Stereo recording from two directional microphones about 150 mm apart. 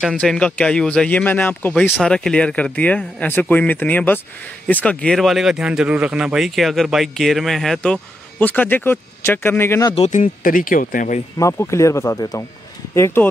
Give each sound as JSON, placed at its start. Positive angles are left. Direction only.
{"t": 0.2, "sound": "speech", "side_deg": 5}
{"t": 9.9, "sound": "speech", "side_deg": 50}
{"t": 10.2, "sound": "speech", "side_deg": 65}
{"t": 11.3, "sound": "speech", "side_deg": 20}